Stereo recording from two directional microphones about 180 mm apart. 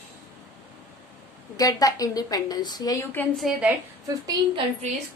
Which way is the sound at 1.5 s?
20° left (ahead or behind).